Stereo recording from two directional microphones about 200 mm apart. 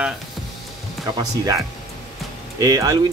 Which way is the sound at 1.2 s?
20° right (ahead or behind).